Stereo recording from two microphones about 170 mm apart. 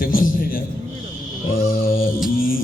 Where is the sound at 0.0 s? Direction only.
55° left (ahead or behind).